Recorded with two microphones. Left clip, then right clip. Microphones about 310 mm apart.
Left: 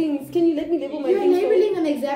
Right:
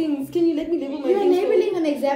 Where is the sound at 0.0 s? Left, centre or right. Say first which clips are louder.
Left 1 dB; centre.